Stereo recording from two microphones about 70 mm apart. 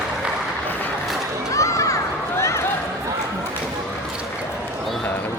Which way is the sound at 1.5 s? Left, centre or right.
Left.